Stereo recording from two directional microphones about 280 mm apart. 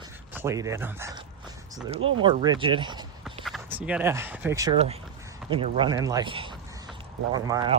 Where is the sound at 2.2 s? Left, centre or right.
Centre.